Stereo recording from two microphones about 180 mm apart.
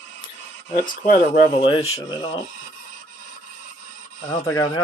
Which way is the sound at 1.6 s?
30° left (ahead or behind).